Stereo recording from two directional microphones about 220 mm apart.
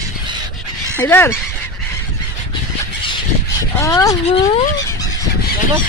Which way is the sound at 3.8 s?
15° left (ahead or behind).